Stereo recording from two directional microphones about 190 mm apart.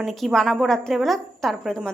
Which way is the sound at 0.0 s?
Centre (ahead or behind).